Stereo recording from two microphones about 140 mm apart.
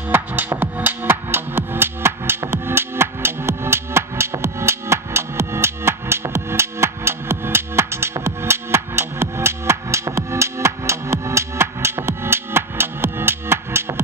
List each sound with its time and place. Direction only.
0.1 s music: 15° right (ahead or behind)